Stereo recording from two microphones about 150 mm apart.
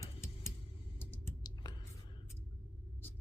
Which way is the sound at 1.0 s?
15° left (ahead or behind).